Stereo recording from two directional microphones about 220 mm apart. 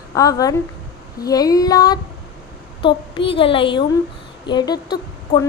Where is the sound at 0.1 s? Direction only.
15° left (ahead or behind).